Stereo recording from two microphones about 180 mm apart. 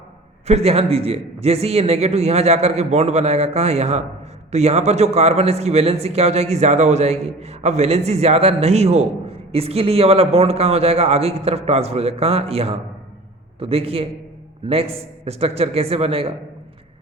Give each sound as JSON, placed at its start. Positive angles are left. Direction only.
{"t": 0.4, "sound": "a man's voice", "side_deg": -35}